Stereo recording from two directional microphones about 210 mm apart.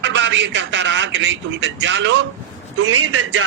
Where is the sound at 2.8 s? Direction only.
90° right.